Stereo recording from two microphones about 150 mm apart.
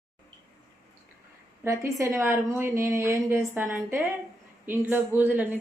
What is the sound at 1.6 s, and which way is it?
A woman's voice, 20° right (ahead or behind).